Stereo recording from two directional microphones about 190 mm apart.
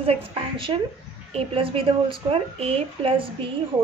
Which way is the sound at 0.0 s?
25° right (ahead or behind).